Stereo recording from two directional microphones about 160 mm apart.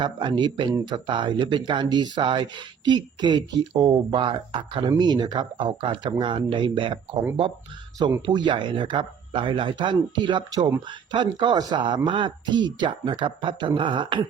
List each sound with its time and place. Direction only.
0.0 s speech: 30° right (ahead or behind)
8.2 s speech: 30° right (ahead or behind)